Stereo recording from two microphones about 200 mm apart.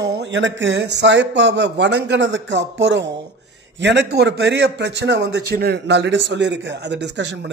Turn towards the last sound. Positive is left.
turn(degrees=-60)  # may be behind; listen again after turning